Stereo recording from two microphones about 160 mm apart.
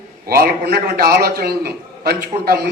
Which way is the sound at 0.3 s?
75° right (ahead or behind).